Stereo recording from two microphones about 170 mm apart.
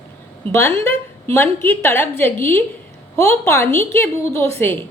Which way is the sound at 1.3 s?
15° left (ahead or behind).